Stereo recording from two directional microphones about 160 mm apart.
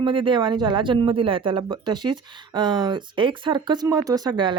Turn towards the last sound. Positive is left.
turn(degrees=-30)  # may be behind; listen again after turning